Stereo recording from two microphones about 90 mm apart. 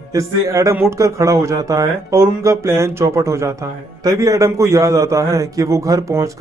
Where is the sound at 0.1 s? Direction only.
35° right (ahead or behind).